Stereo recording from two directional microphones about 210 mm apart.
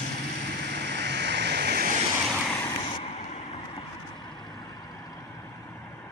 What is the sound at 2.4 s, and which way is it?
Vehicle, 10° left (ahead or behind).